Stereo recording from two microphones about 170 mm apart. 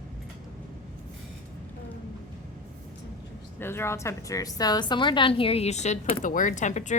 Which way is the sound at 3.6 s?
15° left (ahead or behind).